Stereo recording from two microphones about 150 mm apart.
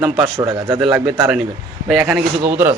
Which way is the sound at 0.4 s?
30° right (ahead or behind).